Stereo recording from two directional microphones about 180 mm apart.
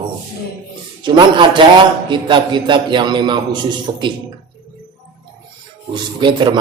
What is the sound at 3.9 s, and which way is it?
Speech, 35° right (ahead or behind).